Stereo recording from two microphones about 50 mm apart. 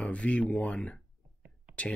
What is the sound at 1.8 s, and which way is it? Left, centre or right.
Speech, left.